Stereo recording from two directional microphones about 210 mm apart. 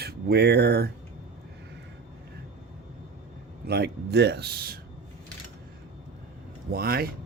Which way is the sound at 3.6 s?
50° right (ahead or behind).